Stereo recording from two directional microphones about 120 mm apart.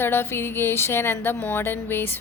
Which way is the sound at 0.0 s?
20° left (ahead or behind).